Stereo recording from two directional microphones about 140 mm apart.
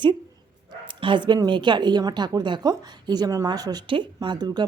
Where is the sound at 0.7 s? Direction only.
35° right (ahead or behind).